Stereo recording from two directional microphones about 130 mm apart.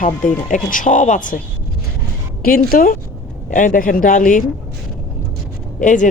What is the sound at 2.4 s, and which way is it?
Speech, 90° left.